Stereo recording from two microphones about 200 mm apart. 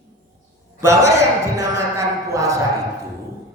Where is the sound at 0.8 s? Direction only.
15° right (ahead or behind).